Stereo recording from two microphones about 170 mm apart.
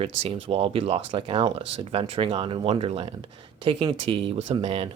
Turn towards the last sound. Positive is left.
turn(degrees=-35)  # may be behind; listen again after turning